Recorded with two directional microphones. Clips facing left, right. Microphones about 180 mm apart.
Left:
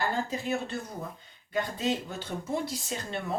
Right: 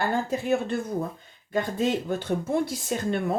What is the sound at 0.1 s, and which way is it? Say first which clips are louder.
Speech: right 6 dB; 55° right (ahead or behind).